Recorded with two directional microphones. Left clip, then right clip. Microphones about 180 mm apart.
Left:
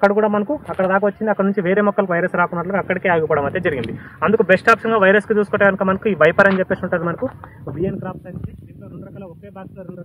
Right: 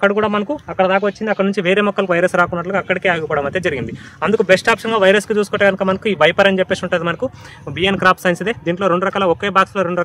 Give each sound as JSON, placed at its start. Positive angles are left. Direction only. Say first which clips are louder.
{"t": 0.0, "sound": "speech", "louder": "even", "side_deg": -50}